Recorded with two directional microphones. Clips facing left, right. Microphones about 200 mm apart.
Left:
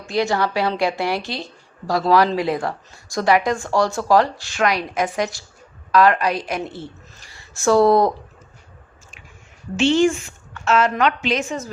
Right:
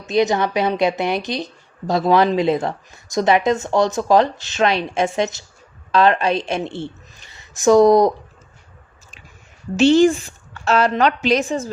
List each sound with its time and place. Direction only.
0.0 s a woman's voice: 20° right (ahead or behind)
9.7 s a woman's voice: 40° right (ahead or behind)